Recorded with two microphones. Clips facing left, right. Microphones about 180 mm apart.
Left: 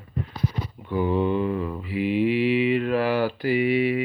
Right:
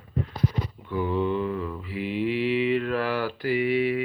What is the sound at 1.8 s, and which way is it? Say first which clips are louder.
Mantra: left 6 dB; 10° left (ahead or behind).